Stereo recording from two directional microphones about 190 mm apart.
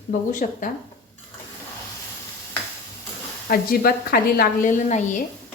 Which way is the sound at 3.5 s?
50° left (ahead or behind).